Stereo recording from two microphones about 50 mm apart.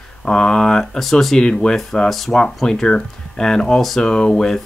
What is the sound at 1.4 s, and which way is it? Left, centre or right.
Speech, centre.